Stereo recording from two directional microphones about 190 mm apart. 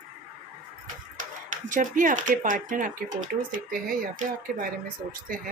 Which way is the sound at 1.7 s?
45° right (ahead or behind).